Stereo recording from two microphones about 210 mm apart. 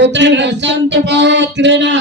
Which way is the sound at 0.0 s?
60° right (ahead or behind).